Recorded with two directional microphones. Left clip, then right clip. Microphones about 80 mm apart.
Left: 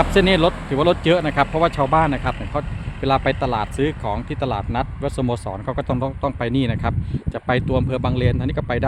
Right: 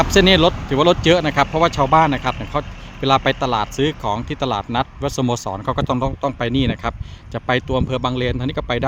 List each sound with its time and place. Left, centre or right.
0.0 s speech: right
6.2 s speech: centre